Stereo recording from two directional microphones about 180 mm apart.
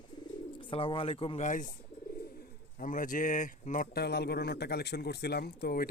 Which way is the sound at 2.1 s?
55° left (ahead or behind).